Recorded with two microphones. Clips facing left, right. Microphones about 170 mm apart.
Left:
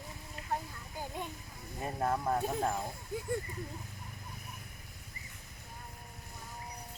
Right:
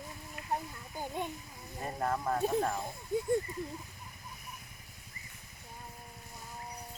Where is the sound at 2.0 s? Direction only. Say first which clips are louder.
Even; 10° left (ahead or behind).